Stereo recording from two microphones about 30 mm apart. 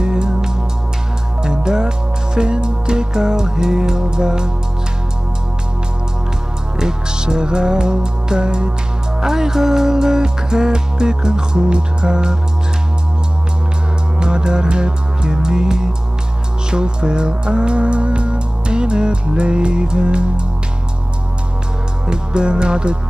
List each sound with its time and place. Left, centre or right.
0.0 s music: right
6.8 s music: right
9.2 s music: centre
14.2 s music: right
22.0 s music: right